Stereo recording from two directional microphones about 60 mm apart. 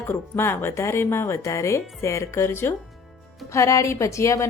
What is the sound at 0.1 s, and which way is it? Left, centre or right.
Speech, left.